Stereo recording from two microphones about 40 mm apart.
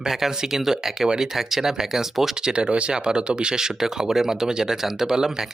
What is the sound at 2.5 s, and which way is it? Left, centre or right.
Speech, right.